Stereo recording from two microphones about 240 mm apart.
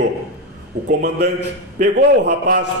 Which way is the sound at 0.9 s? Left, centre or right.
Right.